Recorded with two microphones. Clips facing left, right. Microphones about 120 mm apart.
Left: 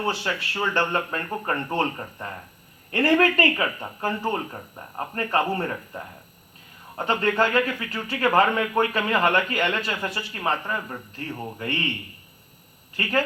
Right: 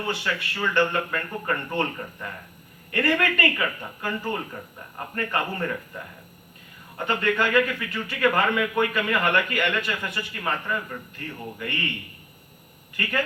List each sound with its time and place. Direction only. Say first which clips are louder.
0.0 s speech: left 2 dB; 35° left (ahead or behind)
13.0 s speech: left 3 dB; 35° left (ahead or behind)